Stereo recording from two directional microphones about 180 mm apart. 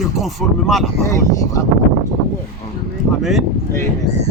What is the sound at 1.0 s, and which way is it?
Speech, 15° left (ahead or behind).